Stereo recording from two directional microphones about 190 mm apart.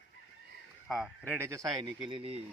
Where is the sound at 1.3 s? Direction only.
15° right (ahead or behind).